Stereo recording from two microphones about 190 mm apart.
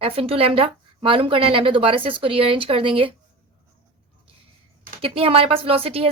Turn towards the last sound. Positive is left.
turn(degrees=-30)  # may be behind; listen again after turning